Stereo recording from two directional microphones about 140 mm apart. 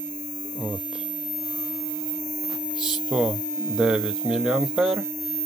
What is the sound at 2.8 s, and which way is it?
Speech, centre (ahead or behind).